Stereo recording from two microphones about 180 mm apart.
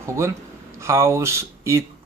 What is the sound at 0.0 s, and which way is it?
Speech, 15° right (ahead or behind).